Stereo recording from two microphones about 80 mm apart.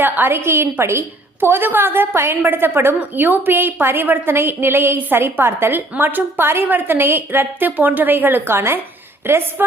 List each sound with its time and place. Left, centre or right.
0.0 s a woman's voice: right